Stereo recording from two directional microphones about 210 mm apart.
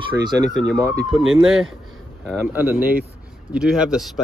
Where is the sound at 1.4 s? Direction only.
5° right (ahead or behind).